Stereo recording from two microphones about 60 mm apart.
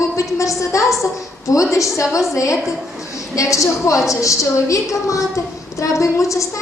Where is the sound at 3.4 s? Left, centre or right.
Left.